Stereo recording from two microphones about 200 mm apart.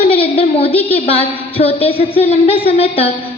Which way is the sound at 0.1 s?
30° left (ahead or behind).